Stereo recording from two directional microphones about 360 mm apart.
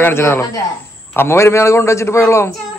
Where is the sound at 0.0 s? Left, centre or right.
Centre.